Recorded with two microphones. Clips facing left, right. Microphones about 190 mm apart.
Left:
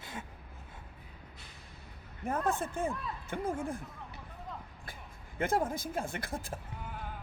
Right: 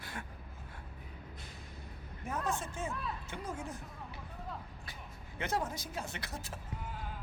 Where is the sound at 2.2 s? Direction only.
55° left (ahead or behind).